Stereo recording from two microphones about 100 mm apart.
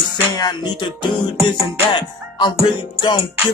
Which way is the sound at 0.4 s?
50° left (ahead or behind).